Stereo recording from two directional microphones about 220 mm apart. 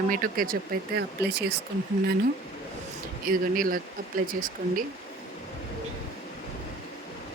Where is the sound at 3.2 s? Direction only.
40° right (ahead or behind).